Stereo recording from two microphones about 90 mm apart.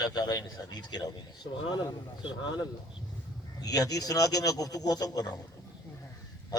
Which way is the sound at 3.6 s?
45° left (ahead or behind).